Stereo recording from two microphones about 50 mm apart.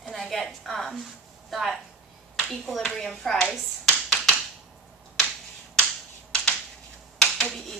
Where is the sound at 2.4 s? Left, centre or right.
Centre.